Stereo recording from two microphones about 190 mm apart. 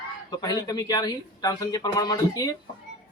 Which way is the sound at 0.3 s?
20° left (ahead or behind).